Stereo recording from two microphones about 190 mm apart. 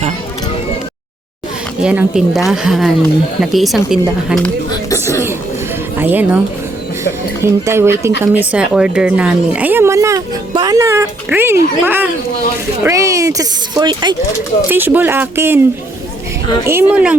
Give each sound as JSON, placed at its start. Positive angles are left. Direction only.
{"t": 1.8, "sound": "speech", "side_deg": -5}
{"t": 6.0, "sound": "a woman's voice", "side_deg": -10}
{"t": 14.7, "sound": "a woman's voice", "side_deg": -10}
{"t": 16.6, "sound": "a woman's voice", "side_deg": -10}